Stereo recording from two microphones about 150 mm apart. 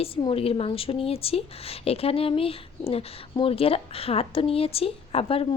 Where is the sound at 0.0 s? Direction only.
35° left (ahead or behind).